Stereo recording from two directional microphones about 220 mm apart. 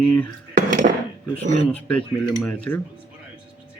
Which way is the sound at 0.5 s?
40° right (ahead or behind).